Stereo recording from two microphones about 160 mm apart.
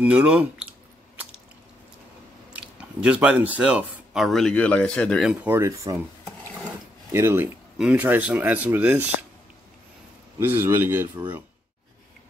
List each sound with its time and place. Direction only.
0.0 s speech: 5° right (ahead or behind)
2.5 s speech: 5° right (ahead or behind)
5.4 s speech: 15° right (ahead or behind)
7.1 s speech: 15° right (ahead or behind)
10.4 s speech: 15° right (ahead or behind)